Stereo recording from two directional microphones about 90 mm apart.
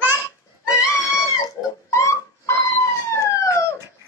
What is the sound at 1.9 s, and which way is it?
Dog, 30° left (ahead or behind).